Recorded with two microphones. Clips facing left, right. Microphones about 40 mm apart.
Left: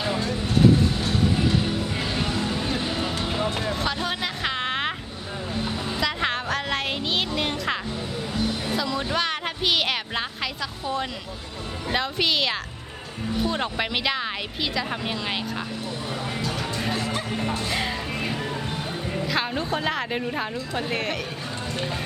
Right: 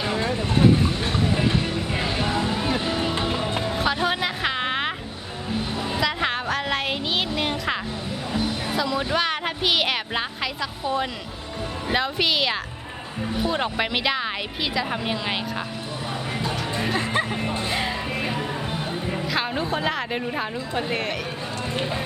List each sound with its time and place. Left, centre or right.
0.2 s vehicle: right
1.0 s music: right; by 11.1 s centre
11.9 s speech: centre
16.4 s music: centre
17.0 s music: right
17.4 s music: centre
17.7 s music: centre
19.3 s speech: centre